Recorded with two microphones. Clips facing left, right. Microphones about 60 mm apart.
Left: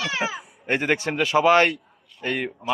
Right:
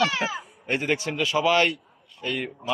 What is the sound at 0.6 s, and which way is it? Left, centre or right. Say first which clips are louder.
A man's voice: left 3 dB; left.